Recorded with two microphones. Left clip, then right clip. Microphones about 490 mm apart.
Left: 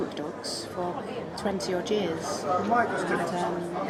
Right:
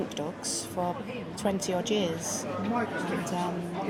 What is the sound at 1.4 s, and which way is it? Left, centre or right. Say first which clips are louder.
Speech: even; right.